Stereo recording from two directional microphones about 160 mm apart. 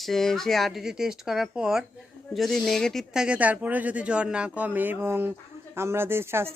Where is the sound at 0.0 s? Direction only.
Centre (ahead or behind).